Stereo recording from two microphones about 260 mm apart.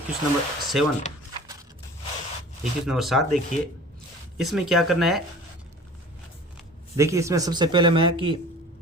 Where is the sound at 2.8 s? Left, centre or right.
Centre.